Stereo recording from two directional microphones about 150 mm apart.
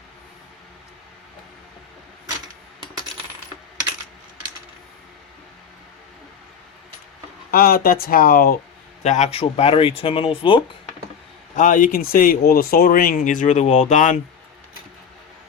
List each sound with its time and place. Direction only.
7.5 s speech: 80° left
9.0 s speech: 50° left (ahead or behind)
11.5 s speech: 60° left (ahead or behind)